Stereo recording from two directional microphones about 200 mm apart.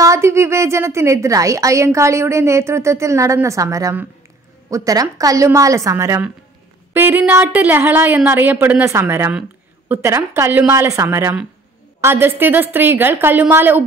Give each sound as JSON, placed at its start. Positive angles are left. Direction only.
{"t": 0.0, "sound": "a woman's voice", "side_deg": -15}